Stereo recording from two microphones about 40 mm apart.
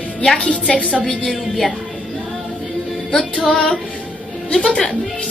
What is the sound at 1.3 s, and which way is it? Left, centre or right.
Speech, centre.